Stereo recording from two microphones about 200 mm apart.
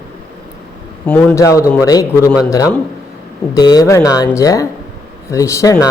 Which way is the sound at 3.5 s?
20° left (ahead or behind).